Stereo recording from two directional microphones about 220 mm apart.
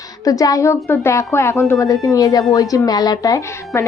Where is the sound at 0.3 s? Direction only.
15° left (ahead or behind).